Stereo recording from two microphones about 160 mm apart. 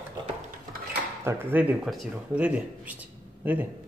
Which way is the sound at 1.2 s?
10° right (ahead or behind).